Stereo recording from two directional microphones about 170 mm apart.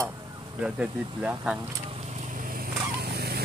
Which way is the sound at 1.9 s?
40° right (ahead or behind).